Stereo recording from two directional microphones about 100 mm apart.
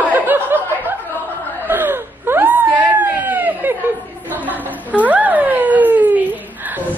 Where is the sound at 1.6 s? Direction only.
20° right (ahead or behind).